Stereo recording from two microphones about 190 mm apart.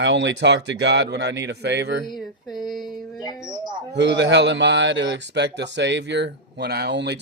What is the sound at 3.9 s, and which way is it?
Speech, 65° right (ahead or behind).